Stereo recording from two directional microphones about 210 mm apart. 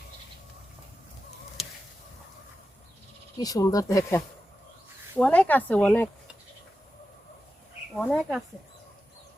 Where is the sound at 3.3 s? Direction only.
15° left (ahead or behind).